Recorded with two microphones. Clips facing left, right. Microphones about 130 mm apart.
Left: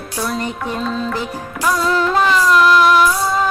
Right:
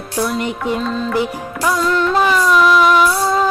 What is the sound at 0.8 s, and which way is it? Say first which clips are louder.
Music: right 1 dB; centre (ahead or behind).